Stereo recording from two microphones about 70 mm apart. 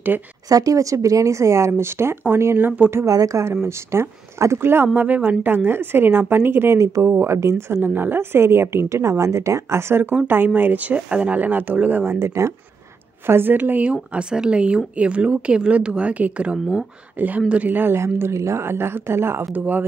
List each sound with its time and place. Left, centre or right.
0.5 s speech: right
3.1 s speech: right
12.1 s speech: right
13.3 s speech: right
19.5 s speech: right